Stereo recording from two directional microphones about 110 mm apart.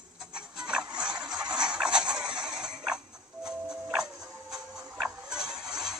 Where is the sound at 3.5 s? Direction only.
5° right (ahead or behind).